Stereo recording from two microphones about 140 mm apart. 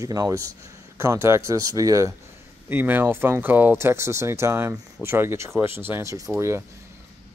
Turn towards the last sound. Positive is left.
turn(degrees=-20)  # may be behind; listen again after turning